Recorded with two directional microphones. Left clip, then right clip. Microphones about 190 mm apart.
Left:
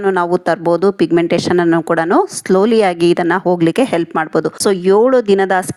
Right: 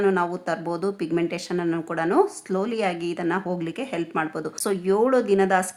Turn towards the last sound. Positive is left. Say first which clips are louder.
# left 7 dB
turn(degrees=40)  # may be behind; listen again after turning